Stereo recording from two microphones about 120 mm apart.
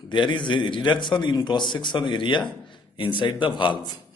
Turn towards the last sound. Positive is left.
turn(degrees=40)  # may be behind; listen again after turning